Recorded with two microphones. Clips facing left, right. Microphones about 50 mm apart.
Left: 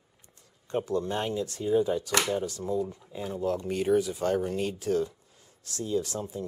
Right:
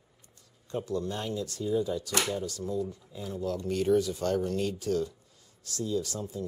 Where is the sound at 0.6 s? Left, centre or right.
Left.